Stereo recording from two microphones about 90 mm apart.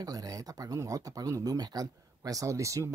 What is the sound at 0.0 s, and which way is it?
Speech, 45° right (ahead or behind).